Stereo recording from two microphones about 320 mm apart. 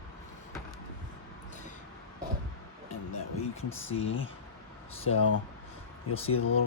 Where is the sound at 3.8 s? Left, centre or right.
Left.